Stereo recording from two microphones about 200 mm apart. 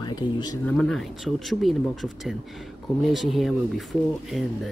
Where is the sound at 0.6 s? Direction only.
5° left (ahead or behind).